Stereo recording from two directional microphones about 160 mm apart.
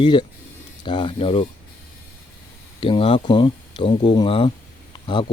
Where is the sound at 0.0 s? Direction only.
30° left (ahead or behind).